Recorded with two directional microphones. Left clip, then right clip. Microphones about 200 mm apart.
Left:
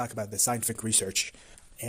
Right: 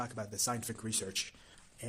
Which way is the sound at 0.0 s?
35° left (ahead or behind).